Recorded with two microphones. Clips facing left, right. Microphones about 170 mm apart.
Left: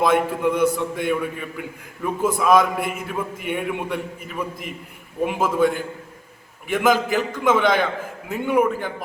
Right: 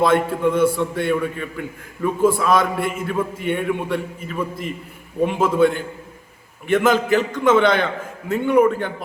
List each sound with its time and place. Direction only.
0.0 s a man's voice: 15° left (ahead or behind)